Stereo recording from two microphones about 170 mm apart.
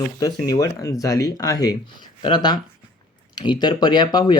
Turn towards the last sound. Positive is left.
turn(degrees=25)  # may be behind; listen again after turning